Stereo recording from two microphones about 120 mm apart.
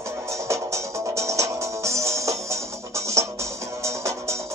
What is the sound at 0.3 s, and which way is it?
Music, 25° right (ahead or behind).